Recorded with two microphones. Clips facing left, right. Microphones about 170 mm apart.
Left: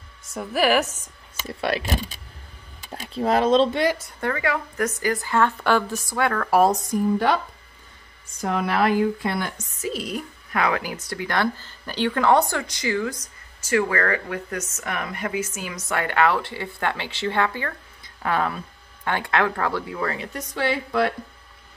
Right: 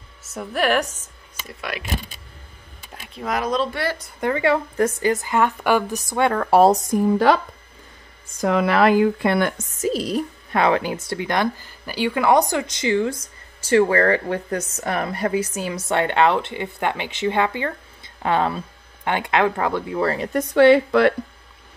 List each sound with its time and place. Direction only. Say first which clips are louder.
0.2 s speech: left 1 dB; centre (ahead or behind)
1.4 s speech: left 6 dB; 30° left (ahead or behind)
2.9 s speech: left 5 dB; 35° left (ahead or behind)
4.2 s speech: right 8 dB; 20° right (ahead or behind)
8.4 s speech: right 5 dB; 90° right; by 9.6 s 65° right (ahead or behind)
9.8 s speech: right 6 dB; 40° right (ahead or behind); by 20.0 s 20° right (ahead or behind)
20.0 s speech: right 6 dB; 35° right (ahead or behind)
20.3 s a woman's voice: right 14 dB; 65° right (ahead or behind)